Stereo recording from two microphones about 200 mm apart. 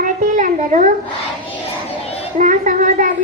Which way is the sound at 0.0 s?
40° right (ahead or behind).